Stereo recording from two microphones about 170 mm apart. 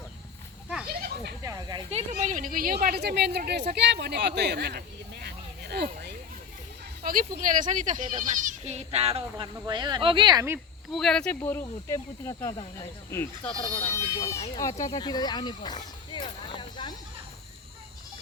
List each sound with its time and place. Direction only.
0.9 s children playing: 65° right (ahead or behind)
1.4 s snake: 20° right (ahead or behind)
1.9 s a woman's voice: 40° right (ahead or behind); by 4.8 s 75° right (ahead or behind)
5.2 s a sound: 70° right (ahead or behind)
7.0 s speech: 55° right (ahead or behind); by 10.6 s 20° right (ahead or behind)
10.9 s speech: 5° left (ahead or behind)
11.4 s speech: 15° left (ahead or behind)
13.5 s speech: 30° left (ahead or behind)
13.9 s speech: 15° left (ahead or behind)